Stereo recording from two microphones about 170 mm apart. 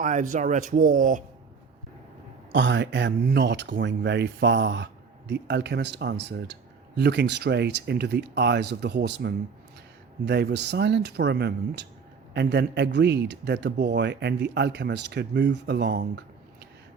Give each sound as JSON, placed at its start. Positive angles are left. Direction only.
{"t": 0.0, "sound": "speech", "side_deg": -45}
{"t": 2.5, "sound": "a man's voice", "side_deg": -90}